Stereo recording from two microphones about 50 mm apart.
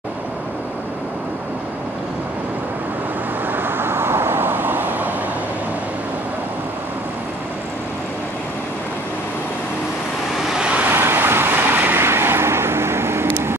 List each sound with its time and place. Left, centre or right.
3.5 s vehicle: right
10.5 s vehicle: centre
10.9 s vehicle: right
12.0 s vehicle: right